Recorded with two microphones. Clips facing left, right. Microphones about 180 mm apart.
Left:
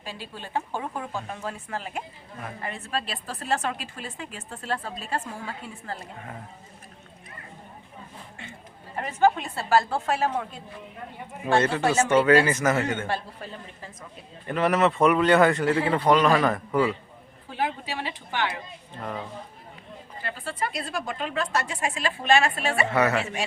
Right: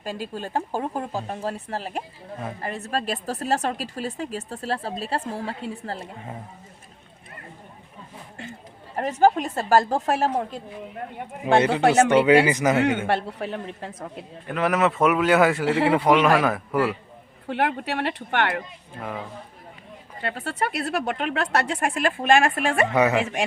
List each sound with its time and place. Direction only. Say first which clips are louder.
0.0 s a woman's voice: right 8 dB; 45° right (ahead or behind)
9.0 s a woman's voice: right 3 dB; 40° right (ahead or behind)
11.5 s speech: right 3 dB; 15° right (ahead or behind)
11.8 s speech: right 5 dB; 65° right (ahead or behind)
12.0 s speech: right 2 dB; 15° right (ahead or behind)
13.1 s speech: right 6 dB; 70° right (ahead or behind)
14.4 s a man's voice: even; centre (ahead or behind)
15.6 s speech: right 2 dB; 75° right (ahead or behind)
15.9 s a man's voice: right 2 dB; 5° right (ahead or behind)
17.5 s speech: right 5 dB; 65° right (ahead or behind)
18.9 s a man's voice: right 1 dB; 5° right (ahead or behind)
20.2 s speech: right 4 dB; 70° right (ahead or behind); by 22.9 s 50° right (ahead or behind)
22.9 s speech: right 1 dB; 15° right (ahead or behind)